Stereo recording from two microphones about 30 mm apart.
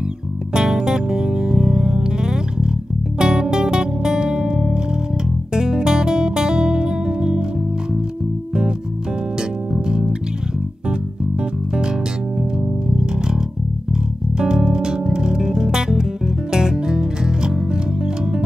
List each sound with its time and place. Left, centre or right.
0.5 s music: right
9.4 s music: right
12.9 s music: right
14.4 s music: right